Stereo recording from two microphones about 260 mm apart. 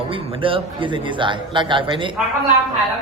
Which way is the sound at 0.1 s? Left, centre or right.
Centre.